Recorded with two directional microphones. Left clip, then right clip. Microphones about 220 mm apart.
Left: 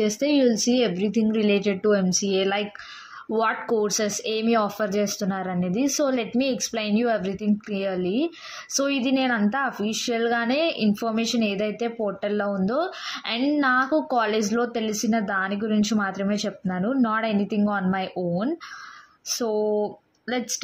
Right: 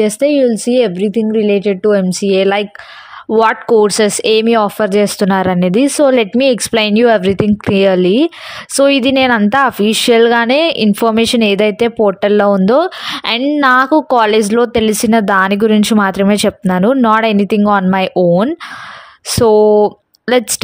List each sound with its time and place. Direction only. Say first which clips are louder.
0.0 s a woman's voice: right 10 dB; 35° right (ahead or behind)